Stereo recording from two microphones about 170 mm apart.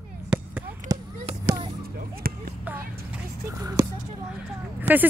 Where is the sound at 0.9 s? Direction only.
20° right (ahead or behind).